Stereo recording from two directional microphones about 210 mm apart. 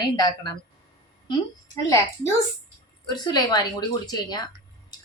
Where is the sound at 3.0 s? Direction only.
20° left (ahead or behind).